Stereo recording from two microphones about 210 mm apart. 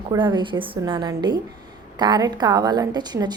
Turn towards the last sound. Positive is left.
turn(degrees=-20)  # may be behind; listen again after turning